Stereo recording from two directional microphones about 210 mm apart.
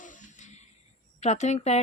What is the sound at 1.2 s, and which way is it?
Speech, 35° left (ahead or behind).